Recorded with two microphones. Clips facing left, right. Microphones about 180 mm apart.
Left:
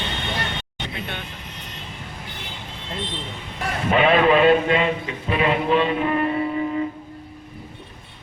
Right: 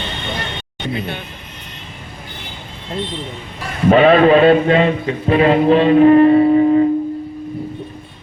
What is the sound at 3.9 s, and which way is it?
A man's voice, 40° right (ahead or behind).